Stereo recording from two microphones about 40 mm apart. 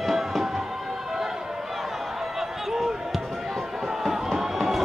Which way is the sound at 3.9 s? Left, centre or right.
Centre.